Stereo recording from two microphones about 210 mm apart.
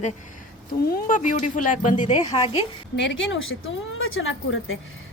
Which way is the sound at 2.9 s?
65° left (ahead or behind).